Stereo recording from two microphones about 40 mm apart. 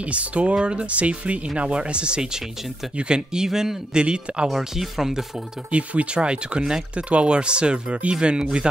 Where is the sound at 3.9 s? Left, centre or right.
Right.